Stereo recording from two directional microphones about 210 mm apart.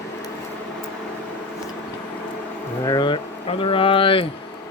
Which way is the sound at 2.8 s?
20° left (ahead or behind).